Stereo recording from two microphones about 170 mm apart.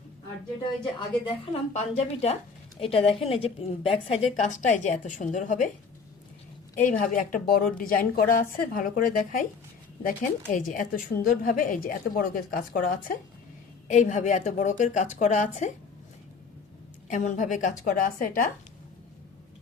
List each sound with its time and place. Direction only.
0.9 s a woman's voice: 30° left (ahead or behind)
1.7 s a woman's voice: 40° left (ahead or behind)
6.7 s a woman's voice: 50° left (ahead or behind)
13.8 s a woman's voice: 45° left (ahead or behind)
17.1 s a woman's voice: 45° left (ahead or behind)